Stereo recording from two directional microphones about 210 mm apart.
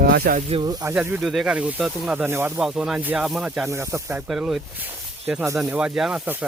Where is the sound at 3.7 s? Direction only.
15° right (ahead or behind).